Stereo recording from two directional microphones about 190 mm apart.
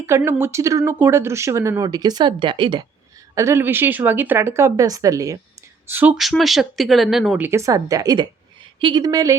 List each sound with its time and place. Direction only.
0.3 s speech: 10° right (ahead or behind)
3.3 s speech: 15° right (ahead or behind)